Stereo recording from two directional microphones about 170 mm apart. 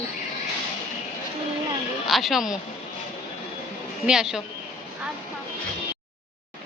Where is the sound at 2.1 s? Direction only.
Centre (ahead or behind).